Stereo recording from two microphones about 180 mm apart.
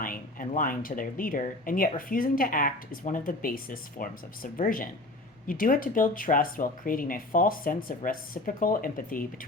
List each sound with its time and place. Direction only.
0.0 s speech: 50° left (ahead or behind)